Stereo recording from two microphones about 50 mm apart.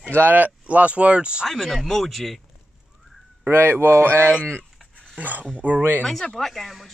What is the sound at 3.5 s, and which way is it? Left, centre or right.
Speech, right.